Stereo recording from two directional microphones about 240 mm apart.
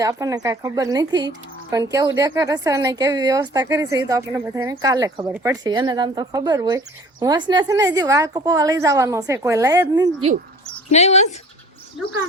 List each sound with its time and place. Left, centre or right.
0.0 s speech: centre
10.9 s speech: left